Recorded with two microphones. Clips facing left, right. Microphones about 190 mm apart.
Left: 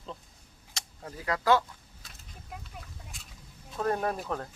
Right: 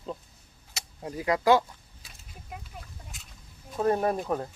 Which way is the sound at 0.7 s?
10° right (ahead or behind).